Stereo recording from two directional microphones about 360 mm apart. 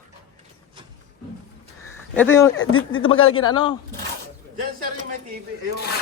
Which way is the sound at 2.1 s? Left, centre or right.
Centre.